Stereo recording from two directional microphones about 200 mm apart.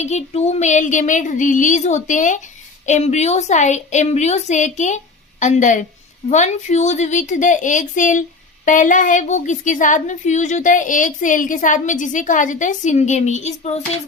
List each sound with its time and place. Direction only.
0.0 s a woman's voice: 35° left (ahead or behind)